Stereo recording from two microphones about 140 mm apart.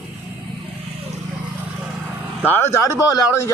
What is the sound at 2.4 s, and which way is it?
Speech, 15° left (ahead or behind).